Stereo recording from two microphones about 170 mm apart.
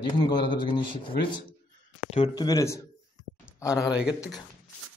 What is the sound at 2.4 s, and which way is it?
A man's voice, 20° left (ahead or behind).